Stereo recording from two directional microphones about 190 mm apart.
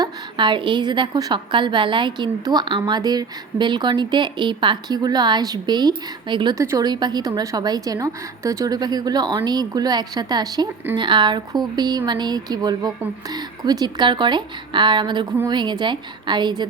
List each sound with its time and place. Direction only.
0.0 s a woman's voice: 25° right (ahead or behind)